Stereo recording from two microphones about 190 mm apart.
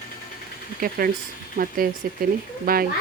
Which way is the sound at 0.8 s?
50° right (ahead or behind).